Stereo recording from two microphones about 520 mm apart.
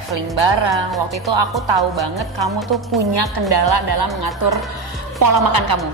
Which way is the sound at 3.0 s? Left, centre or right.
Right.